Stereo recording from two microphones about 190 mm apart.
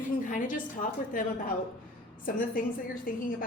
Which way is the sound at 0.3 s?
45° left (ahead or behind).